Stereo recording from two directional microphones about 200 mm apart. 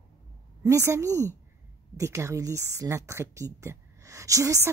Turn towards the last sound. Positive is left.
turn(degrees=-15)  # may be behind; listen again after turning